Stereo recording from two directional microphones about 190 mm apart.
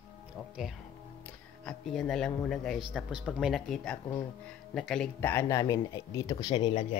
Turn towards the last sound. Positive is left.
turn(degrees=20)  # may be behind; listen again after turning